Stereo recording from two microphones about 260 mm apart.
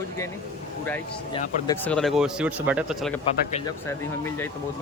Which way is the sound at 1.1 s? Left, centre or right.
Centre.